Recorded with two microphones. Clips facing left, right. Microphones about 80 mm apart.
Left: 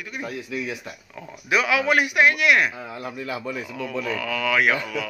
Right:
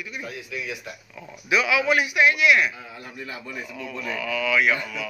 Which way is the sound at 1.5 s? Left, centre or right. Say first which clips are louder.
Left 1 dB; left.